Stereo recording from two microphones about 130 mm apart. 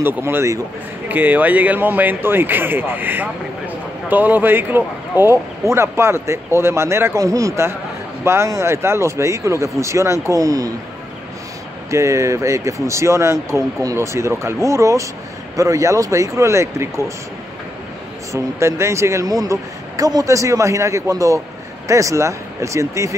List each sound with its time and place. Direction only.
0.0 s speech: 20° right (ahead or behind)
11.9 s speech: 25° right (ahead or behind)
18.3 s speech: 20° right (ahead or behind)